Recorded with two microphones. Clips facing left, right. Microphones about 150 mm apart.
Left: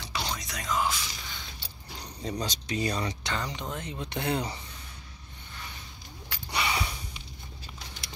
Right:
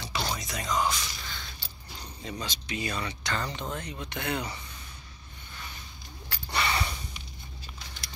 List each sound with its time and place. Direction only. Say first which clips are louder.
0.1 s music: right 2 dB; centre (ahead or behind)
2.2 s speech: left 4 dB; 35° left (ahead or behind)
3.3 s speech: right 1 dB; 15° left (ahead or behind); by 4.6 s 30° left (ahead or behind)
6.2 s a sound: right 1 dB; 10° left (ahead or behind)